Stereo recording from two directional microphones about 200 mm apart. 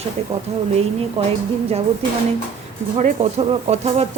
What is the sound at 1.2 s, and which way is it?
Speech, 30° right (ahead or behind).